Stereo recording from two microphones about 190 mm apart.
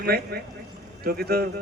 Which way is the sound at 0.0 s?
55° right (ahead or behind).